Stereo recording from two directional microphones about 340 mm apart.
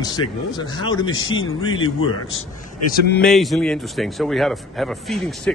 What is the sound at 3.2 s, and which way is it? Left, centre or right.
Speech, centre.